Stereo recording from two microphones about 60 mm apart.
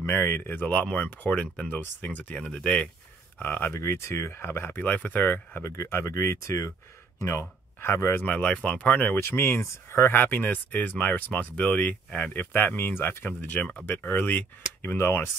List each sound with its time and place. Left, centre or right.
0.0 s speech: left
2.4 s speech: centre
3.4 s speech: left
3.8 s speech: left
4.7 s speech: left
5.6 s speech: left
8.3 s speech: centre
9.2 s speech: left
10.1 s speech: left